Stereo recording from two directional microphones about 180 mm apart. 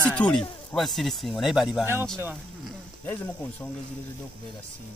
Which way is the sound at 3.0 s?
10° left (ahead or behind).